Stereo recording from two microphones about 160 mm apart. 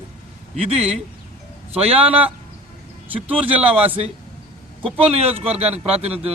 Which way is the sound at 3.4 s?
10° right (ahead or behind).